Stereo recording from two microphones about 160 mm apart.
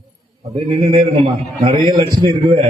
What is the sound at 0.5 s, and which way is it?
A man's voice, 40° right (ahead or behind).